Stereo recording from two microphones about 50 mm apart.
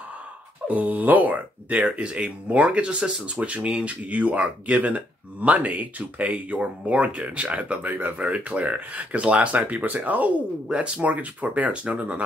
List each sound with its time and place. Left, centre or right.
0.7 s speech: right
1.8 s speech: right